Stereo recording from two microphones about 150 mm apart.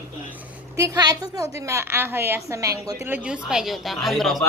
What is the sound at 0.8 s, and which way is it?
A woman's voice, 25° right (ahead or behind).